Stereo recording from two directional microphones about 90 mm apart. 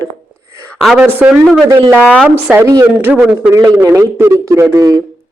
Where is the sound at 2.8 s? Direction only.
25° right (ahead or behind); by 5.0 s 40° right (ahead or behind).